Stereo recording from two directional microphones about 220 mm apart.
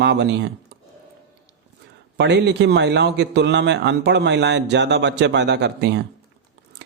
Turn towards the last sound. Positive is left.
turn(degrees=-50)  # may be behind; listen again after turning